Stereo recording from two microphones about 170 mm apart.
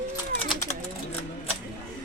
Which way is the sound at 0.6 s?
45° left (ahead or behind).